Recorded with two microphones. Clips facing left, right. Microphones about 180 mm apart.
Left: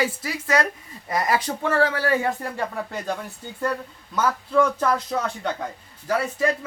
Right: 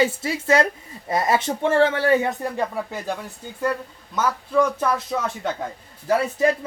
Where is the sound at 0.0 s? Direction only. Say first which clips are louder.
Right 4 dB; 25° right (ahead or behind).